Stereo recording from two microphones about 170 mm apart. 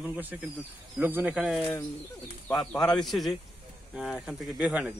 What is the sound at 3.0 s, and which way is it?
Speech, centre (ahead or behind).